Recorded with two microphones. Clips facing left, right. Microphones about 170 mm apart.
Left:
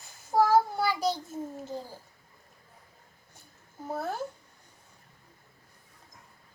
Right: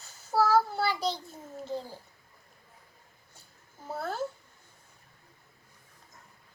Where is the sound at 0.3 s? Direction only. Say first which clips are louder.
Left 2 dB; 15° left (ahead or behind).